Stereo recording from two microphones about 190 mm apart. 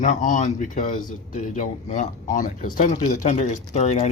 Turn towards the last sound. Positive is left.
turn(degrees=35)  # may be behind; listen again after turning